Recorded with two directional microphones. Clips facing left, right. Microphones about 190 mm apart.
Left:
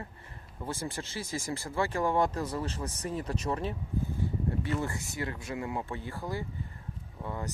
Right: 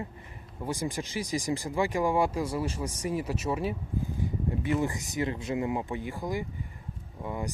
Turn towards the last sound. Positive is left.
turn(degrees=-15)  # may be behind; listen again after turning